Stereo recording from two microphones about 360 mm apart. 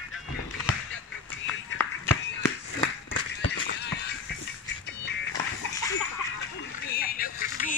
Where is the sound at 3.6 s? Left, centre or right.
Left.